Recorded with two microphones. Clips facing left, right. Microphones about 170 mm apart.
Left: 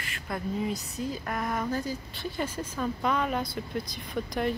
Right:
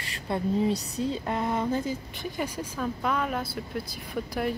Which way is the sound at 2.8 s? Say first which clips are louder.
Even; centre (ahead or behind).